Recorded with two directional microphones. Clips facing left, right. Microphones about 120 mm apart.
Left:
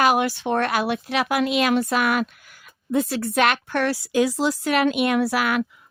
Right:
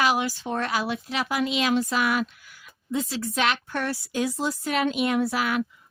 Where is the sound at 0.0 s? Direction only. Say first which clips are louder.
Left 5 dB; 55° left (ahead or behind).